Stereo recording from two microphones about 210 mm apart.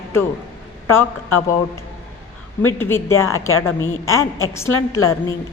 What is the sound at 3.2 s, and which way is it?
A woman's voice, 85° left.